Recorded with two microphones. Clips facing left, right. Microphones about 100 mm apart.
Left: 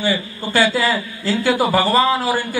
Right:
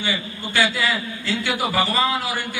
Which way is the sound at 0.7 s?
35° left (ahead or behind).